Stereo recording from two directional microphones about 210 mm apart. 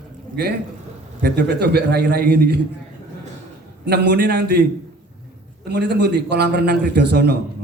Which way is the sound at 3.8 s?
50° right (ahead or behind).